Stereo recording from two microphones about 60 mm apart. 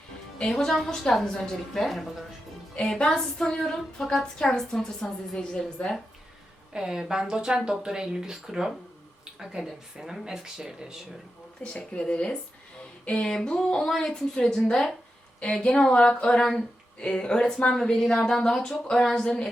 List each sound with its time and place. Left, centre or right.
0.4 s speech: centre
2.7 s speech: centre
6.7 s speech: centre
11.6 s speech: centre